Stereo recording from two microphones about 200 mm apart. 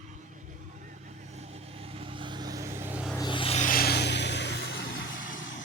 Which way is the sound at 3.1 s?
25° left (ahead or behind).